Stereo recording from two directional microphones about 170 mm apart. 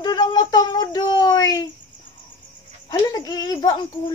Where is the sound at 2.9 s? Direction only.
25° left (ahead or behind).